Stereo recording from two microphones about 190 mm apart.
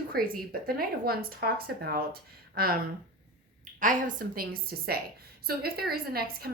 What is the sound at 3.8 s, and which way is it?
A woman's voice, 45° right (ahead or behind).